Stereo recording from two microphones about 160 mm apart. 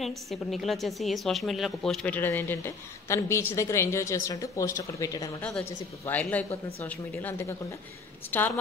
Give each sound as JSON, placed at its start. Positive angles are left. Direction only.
{"t": 0.3, "sound": "speech", "side_deg": 0}